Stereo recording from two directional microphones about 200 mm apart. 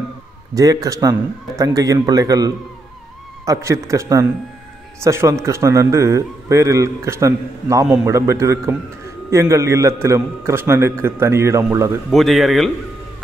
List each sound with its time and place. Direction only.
0.6 s a man's voice: 15° right (ahead or behind)
12.1 s speech: centre (ahead or behind)